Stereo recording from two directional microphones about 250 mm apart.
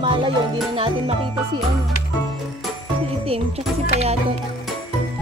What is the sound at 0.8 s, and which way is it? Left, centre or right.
Speech, right.